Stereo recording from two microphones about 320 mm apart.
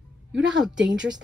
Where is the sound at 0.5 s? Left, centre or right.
Centre.